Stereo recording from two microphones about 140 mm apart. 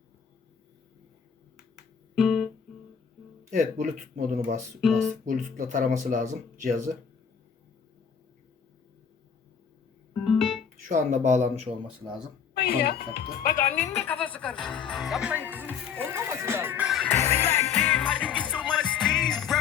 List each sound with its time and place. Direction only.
2.1 s guitar: centre (ahead or behind)
3.5 s speech: 65° right (ahead or behind)
4.8 s speech: centre (ahead or behind)
5.2 s speech: 65° right (ahead or behind)
10.2 s music: centre (ahead or behind)
10.8 s speech: 60° right (ahead or behind)
12.6 s speech: 90° left
14.0 s speech: 10° left (ahead or behind); by 16.9 s 15° right (ahead or behind)
16.9 s music: 5° left (ahead or behind)
17.2 s music: 20° left (ahead or behind); by 19.5 s 5° left (ahead or behind)